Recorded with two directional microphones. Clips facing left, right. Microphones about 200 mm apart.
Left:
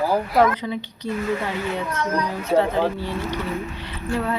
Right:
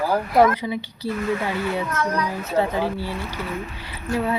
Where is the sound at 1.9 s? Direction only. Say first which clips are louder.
Even; 25° left (ahead or behind).